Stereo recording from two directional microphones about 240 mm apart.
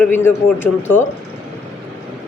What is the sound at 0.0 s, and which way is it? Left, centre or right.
A woman's voice, centre.